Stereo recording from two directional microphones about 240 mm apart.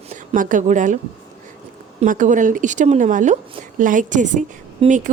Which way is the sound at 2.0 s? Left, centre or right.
Right.